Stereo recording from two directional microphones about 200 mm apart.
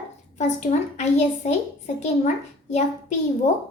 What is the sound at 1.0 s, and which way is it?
A woman's voice, 35° left (ahead or behind).